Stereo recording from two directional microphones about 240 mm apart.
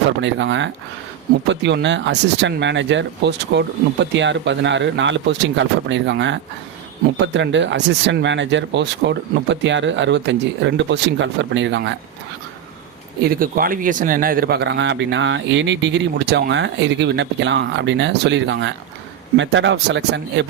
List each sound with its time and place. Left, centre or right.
0.2 s speech: right
13.2 s speech: right